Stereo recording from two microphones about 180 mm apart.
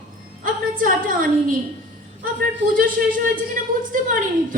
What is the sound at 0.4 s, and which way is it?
Music, 50° right (ahead or behind).